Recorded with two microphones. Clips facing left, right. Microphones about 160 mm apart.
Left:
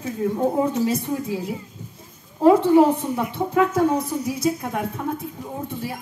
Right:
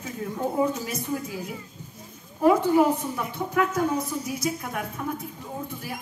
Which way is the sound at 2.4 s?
25° left (ahead or behind).